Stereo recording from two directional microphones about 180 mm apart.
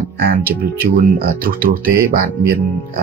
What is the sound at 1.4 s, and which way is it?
Speech, 50° right (ahead or behind).